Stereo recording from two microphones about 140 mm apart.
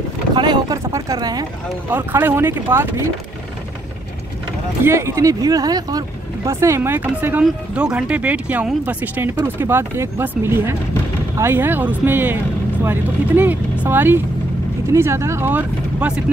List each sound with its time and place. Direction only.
0.3 s speech: 30° right (ahead or behind)
2.0 s speech: 15° right (ahead or behind)
4.8 s speech: 20° right (ahead or behind)